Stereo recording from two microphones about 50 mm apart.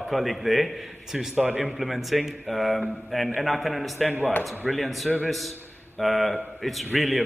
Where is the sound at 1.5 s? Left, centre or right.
Centre.